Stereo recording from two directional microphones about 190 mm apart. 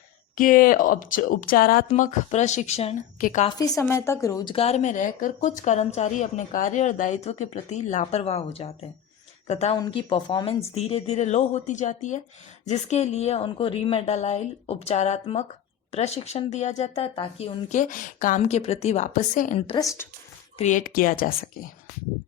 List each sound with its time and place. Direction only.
0.3 s a woman's voice: 45° left (ahead or behind)
1.9 s a woman's voice: 40° left (ahead or behind)
3.6 s a woman's voice: 15° left (ahead or behind)
4.5 s a woman's voice: 35° left (ahead or behind)
19.8 s a woman's voice: 15° left (ahead or behind)
20.6 s a woman's voice: 40° left (ahead or behind)